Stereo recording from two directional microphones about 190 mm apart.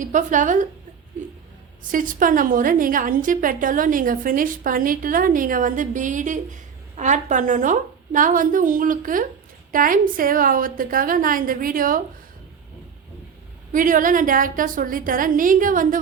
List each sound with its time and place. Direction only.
0.0 s a woman's voice: 40° right (ahead or behind)
1.9 s a woman's voice: 45° right (ahead or behind)
13.7 s a woman's voice: 45° right (ahead or behind)